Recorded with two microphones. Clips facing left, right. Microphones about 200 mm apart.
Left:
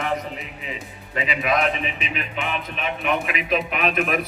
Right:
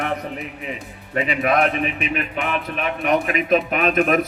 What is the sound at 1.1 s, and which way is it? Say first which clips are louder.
A man's voice: right 4 dB; 55° right (ahead or behind).